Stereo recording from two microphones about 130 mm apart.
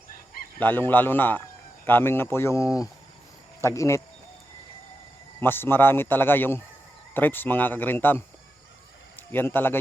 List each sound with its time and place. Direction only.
0.6 s a man's voice: 15° left (ahead or behind)
5.4 s a man's voice: 15° left (ahead or behind)
9.3 s a man's voice: 15° left (ahead or behind)